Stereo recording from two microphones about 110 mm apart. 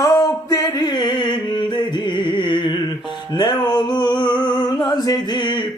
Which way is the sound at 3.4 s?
40° left (ahead or behind).